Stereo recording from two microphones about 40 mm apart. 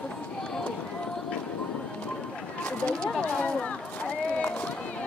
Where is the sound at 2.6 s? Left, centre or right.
Left.